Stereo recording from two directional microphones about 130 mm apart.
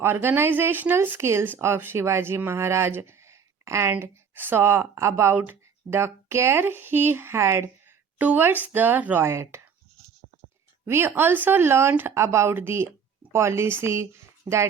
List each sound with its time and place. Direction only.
0.0 s speech: 15° right (ahead or behind)
10.8 s speech: 20° right (ahead or behind)